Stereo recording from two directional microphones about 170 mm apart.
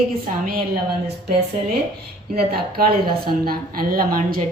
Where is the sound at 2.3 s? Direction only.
65° right (ahead or behind).